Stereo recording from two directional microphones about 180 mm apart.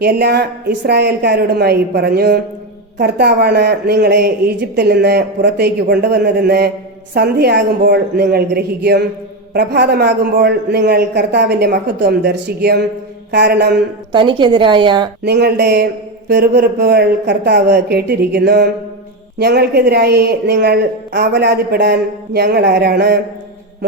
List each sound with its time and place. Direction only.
0.0 s a woman's voice: 60° right (ahead or behind)
14.1 s speech: 25° right (ahead or behind)
15.2 s a woman's voice: 65° right (ahead or behind)